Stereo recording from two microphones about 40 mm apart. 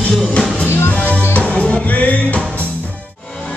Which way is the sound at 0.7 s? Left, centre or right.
Left.